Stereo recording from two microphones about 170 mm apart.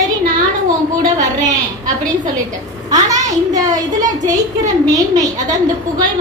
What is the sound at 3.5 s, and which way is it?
A woman's voice, 20° right (ahead or behind).